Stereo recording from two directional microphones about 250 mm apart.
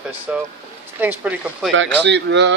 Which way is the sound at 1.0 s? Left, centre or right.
Centre.